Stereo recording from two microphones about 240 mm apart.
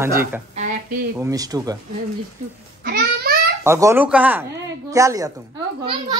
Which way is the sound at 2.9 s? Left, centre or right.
Right.